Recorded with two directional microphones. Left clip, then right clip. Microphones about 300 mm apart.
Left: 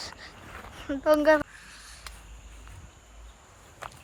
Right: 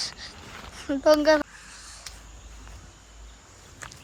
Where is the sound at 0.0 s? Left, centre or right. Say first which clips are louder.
Right 6 dB; centre.